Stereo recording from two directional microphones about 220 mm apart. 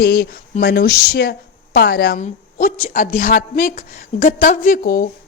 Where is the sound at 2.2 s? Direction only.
35° left (ahead or behind).